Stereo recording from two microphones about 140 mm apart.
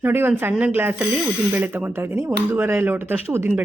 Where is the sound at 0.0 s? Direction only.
15° right (ahead or behind).